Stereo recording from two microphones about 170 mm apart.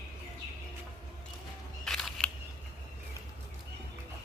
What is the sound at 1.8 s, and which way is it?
Single-lens reflex camera, centre (ahead or behind).